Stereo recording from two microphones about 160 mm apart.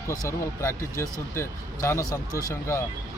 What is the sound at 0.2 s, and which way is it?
Speech, 15° left (ahead or behind).